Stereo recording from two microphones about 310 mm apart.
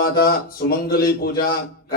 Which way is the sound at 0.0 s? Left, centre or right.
Left.